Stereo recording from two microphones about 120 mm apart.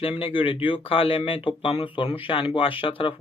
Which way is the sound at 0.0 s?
50° left (ahead or behind).